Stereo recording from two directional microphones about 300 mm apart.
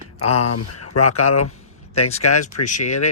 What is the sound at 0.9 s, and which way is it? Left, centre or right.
Speech, left.